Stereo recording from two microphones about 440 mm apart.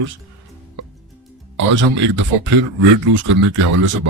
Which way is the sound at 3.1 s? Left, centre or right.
Right.